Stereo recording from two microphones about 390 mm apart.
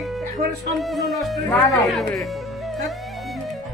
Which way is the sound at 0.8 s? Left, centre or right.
Centre.